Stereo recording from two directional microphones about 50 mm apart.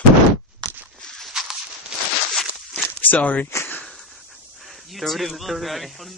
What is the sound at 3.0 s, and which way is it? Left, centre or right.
Speech, left.